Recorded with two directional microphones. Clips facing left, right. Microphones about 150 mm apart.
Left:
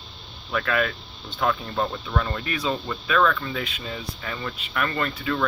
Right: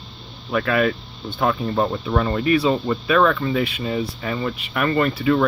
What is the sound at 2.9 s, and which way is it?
Speech, 40° right (ahead or behind).